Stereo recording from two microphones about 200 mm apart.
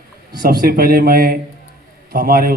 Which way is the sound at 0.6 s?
50° right (ahead or behind).